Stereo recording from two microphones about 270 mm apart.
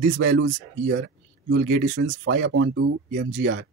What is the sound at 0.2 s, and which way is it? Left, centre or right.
Speech, right.